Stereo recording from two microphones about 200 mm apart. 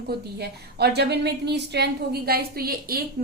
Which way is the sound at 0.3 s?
55° right (ahead or behind).